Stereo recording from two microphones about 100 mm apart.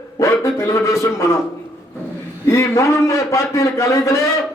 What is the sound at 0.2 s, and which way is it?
Speech, 30° left (ahead or behind).